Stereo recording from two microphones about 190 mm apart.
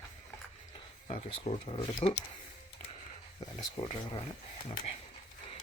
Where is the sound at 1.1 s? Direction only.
30° left (ahead or behind).